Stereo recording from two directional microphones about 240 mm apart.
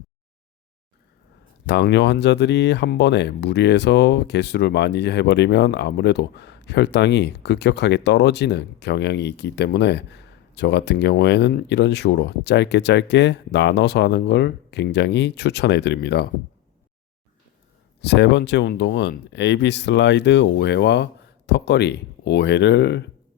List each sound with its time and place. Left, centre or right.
1.6 s speech: left
18.0 s speech: left